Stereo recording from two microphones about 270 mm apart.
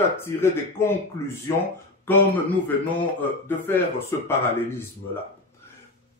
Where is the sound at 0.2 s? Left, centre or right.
Centre.